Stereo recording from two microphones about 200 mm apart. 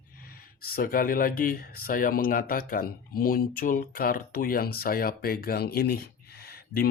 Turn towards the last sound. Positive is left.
turn(degrees=50)  # may be behind; listen again after turning